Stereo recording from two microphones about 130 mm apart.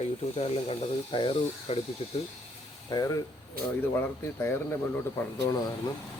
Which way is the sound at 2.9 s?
25° left (ahead or behind).